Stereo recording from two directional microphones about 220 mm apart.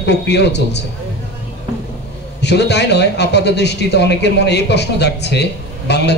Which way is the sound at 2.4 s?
50° left (ahead or behind).